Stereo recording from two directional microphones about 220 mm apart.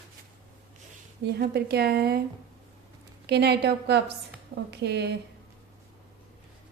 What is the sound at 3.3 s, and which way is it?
Speech, 50° right (ahead or behind).